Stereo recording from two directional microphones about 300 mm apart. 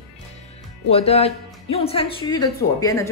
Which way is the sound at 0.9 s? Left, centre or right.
Centre.